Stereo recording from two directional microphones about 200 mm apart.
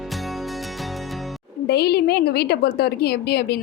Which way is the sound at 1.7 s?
55° left (ahead or behind).